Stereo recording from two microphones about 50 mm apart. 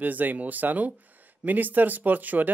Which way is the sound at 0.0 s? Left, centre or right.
Right.